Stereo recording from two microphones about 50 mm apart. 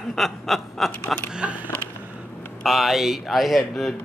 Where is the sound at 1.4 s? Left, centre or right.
Right.